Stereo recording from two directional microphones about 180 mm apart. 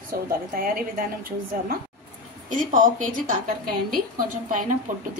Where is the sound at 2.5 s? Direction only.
45° right (ahead or behind).